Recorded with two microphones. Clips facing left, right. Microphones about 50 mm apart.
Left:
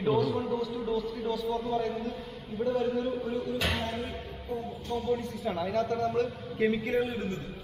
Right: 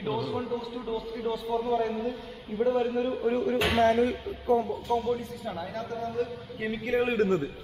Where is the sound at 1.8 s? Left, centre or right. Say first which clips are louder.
Right 3 dB; right.